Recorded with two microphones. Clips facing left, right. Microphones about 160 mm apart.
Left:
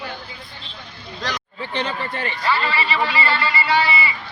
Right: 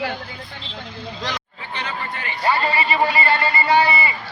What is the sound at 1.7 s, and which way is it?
Speech, 30° left (ahead or behind).